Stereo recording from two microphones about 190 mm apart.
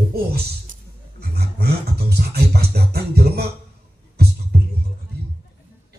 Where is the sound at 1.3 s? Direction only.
55° right (ahead or behind).